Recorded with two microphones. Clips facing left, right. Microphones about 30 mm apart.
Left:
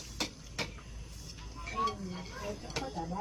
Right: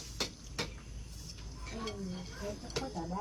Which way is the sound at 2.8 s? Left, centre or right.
Centre.